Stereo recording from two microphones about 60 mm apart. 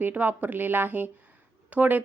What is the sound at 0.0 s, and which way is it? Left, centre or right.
A woman's voice, right.